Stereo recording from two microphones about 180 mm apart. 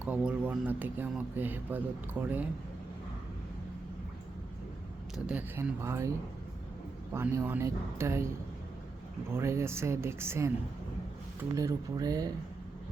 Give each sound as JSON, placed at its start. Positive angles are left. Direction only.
{"t": 0.0, "sound": "speech", "side_deg": -5}
{"t": 5.1, "sound": "speech", "side_deg": -5}
{"t": 7.1, "sound": "speech", "side_deg": -15}
{"t": 9.3, "sound": "speech", "side_deg": -15}
{"t": 11.5, "sound": "speech", "side_deg": -20}